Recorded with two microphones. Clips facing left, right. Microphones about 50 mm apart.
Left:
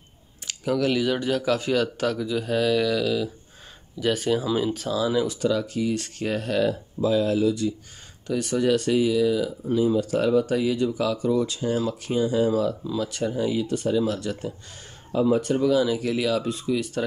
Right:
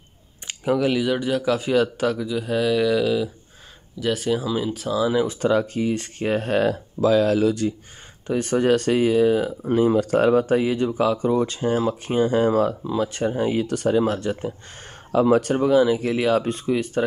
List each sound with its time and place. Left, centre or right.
0.7 s speech: centre
4.0 s speech: centre
5.2 s speech: right
7.0 s speech: right
8.3 s speech: right
10.4 s speech: right
14.0 s speech: right
15.1 s speech: right
15.7 s speech: right